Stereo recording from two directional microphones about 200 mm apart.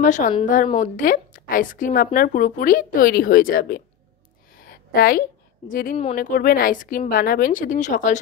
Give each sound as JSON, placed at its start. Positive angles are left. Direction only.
{"t": 0.0, "sound": "a woman's voice", "side_deg": 40}
{"t": 4.6, "sound": "a sound", "side_deg": 50}
{"t": 5.7, "sound": "a woman's voice", "side_deg": 45}